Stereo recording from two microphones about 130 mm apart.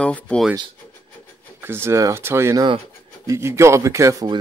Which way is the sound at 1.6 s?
20° right (ahead or behind).